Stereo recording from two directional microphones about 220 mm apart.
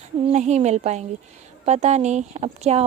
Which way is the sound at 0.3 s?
30° right (ahead or behind).